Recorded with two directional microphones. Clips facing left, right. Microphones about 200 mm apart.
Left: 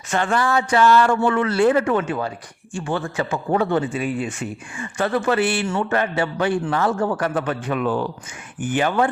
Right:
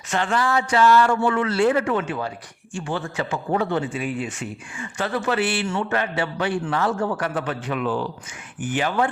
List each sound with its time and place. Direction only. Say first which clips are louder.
0.1 s speech: left 2 dB; 50° left (ahead or behind)